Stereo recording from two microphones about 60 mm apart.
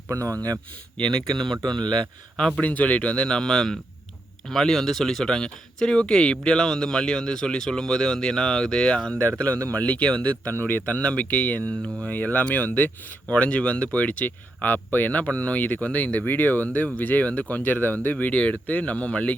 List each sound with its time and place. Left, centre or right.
0.1 s speech: right
0.9 s speech: centre